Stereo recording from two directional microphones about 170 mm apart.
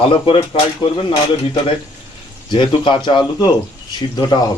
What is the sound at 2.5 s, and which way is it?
A man's voice, 30° left (ahead or behind).